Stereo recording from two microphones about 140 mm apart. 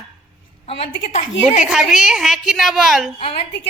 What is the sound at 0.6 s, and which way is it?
A woman's voice, 45° left (ahead or behind).